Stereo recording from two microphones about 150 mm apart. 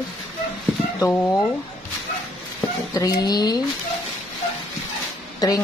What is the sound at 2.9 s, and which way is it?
Speech, 25° left (ahead or behind).